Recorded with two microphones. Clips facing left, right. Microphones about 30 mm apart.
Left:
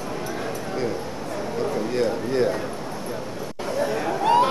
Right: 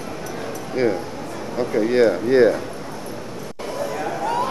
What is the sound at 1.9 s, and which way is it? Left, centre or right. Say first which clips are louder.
Speech: right 10 dB; right.